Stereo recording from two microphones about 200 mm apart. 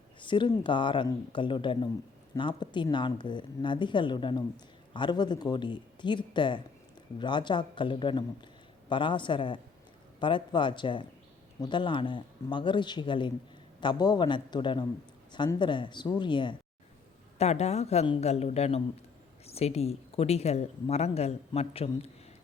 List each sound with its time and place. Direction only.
0.2 s speech: 25° left (ahead or behind)